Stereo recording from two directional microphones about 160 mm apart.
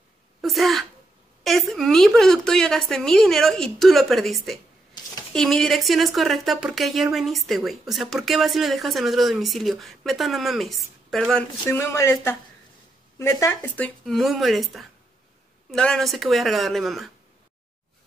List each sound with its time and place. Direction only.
0.4 s a woman's voice: centre (ahead or behind)
11.7 s a woman's voice: 15° left (ahead or behind); by 17.1 s centre (ahead or behind)